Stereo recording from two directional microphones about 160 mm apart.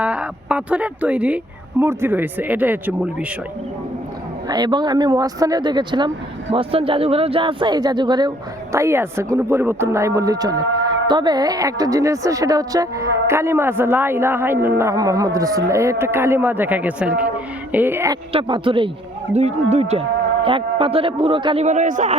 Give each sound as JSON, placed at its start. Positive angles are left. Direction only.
{"t": 0.0, "sound": "speech", "side_deg": -5}
{"t": 4.4, "sound": "speech", "side_deg": -25}
{"t": 8.7, "sound": "speech", "side_deg": -15}
{"t": 18.3, "sound": "speech", "side_deg": -35}
{"t": 19.3, "sound": "speech", "side_deg": -45}